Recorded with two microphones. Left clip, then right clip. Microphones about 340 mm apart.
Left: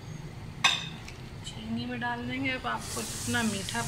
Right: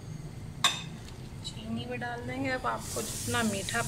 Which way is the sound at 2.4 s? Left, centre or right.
Right.